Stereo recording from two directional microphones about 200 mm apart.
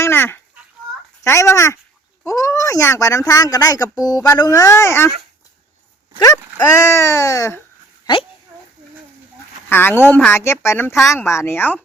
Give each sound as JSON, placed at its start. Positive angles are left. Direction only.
{"t": 0.0, "sound": "a sound", "side_deg": 10}
{"t": 1.2, "sound": "speech", "side_deg": 15}
{"t": 6.1, "sound": "speech", "side_deg": 15}
{"t": 9.6, "sound": "a woman's voice", "side_deg": 10}